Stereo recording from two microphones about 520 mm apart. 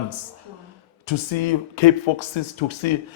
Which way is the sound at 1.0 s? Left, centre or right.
Left.